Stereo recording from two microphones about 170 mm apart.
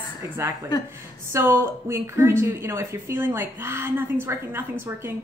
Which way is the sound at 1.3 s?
15° right (ahead or behind).